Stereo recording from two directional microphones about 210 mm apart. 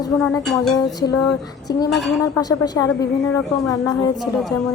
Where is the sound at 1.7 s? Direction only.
20° left (ahead or behind).